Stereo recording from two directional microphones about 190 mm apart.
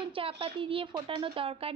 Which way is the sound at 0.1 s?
30° right (ahead or behind).